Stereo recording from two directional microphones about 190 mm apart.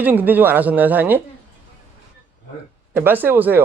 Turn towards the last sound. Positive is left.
turn(degrees=-10)  # may be behind; listen again after turning